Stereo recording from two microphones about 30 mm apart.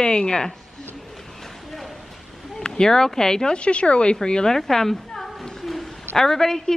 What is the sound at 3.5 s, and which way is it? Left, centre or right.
Speech, left.